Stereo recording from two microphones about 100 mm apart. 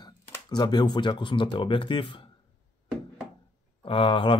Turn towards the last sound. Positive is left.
turn(degrees=55)  # may be behind; listen again after turning